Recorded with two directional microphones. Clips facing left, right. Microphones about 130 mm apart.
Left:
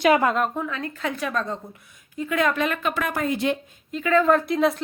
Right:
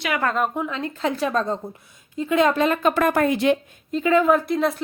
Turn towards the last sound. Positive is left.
turn(degrees=0)  # may be behind; listen again after turning